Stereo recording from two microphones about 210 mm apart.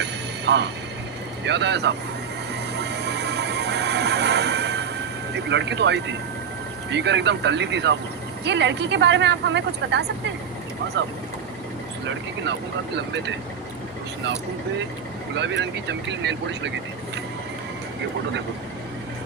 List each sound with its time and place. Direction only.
0.0 s train: 55° right (ahead or behind)
1.5 s speech: 55° right (ahead or behind)
2.8 s music: 55° right (ahead or behind)
5.3 s speech: 55° right (ahead or behind)
15.4 s speech: 55° right (ahead or behind)